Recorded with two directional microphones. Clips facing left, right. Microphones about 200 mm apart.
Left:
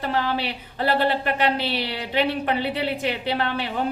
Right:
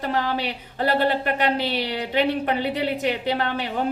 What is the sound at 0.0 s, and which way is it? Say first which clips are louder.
A woman's voice: even; 45° right (ahead or behind).